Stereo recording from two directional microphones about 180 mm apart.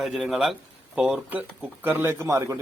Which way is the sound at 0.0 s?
Centre (ahead or behind).